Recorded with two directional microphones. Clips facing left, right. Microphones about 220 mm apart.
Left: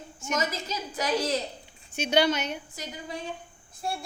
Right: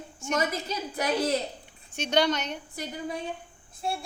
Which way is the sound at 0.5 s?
55° right (ahead or behind).